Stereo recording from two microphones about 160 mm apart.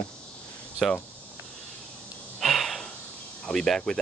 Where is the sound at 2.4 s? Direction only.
Centre (ahead or behind).